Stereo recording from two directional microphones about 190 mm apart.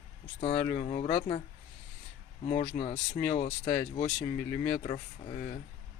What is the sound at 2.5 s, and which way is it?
Speech, 30° left (ahead or behind).